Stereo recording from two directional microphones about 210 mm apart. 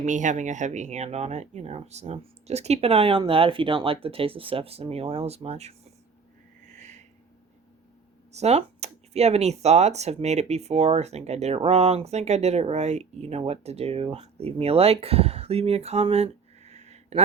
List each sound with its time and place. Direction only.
0.0 s speech: 35° right (ahead or behind)
6.7 s a sound: 35° right (ahead or behind)
8.3 s speech: 30° right (ahead or behind)